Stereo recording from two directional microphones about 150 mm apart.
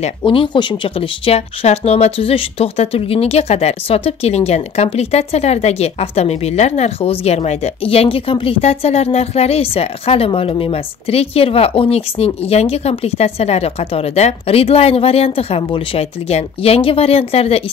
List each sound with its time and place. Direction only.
0.2 s speech: 35° left (ahead or behind)